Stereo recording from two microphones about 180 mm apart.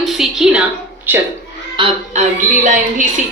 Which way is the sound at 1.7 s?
30° right (ahead or behind).